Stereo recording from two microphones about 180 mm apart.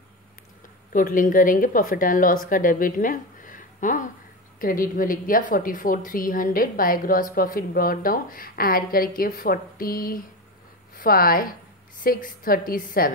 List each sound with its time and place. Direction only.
0.9 s a woman's voice: 50° left (ahead or behind)